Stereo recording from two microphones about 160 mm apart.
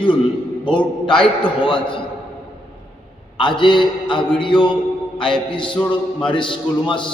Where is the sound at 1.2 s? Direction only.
5° left (ahead or behind).